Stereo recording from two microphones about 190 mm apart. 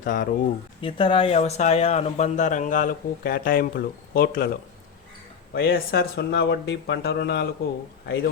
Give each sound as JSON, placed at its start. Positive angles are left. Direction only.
{"t": 0.0, "sound": "speech", "side_deg": 45}
{"t": 0.8, "sound": "speech", "side_deg": 25}
{"t": 5.5, "sound": "speech", "side_deg": 55}